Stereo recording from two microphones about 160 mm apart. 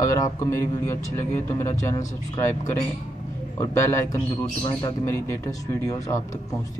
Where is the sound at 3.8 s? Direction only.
15° left (ahead or behind).